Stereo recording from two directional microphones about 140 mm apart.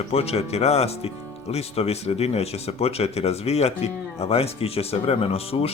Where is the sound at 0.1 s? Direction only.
45° left (ahead or behind).